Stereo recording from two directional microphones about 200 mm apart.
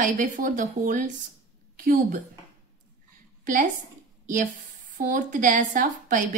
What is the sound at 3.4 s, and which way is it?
Speech, 40° right (ahead or behind).